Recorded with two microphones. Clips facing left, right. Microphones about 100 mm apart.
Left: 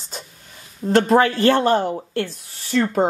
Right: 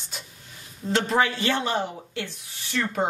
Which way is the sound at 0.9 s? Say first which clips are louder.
Left 8 dB; 45° left (ahead or behind).